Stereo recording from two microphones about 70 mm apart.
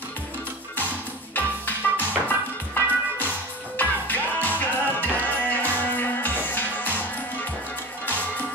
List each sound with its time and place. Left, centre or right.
0.7 s music: left
8.1 s music: left